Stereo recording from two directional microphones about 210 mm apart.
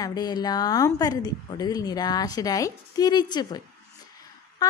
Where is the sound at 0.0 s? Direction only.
20° left (ahead or behind).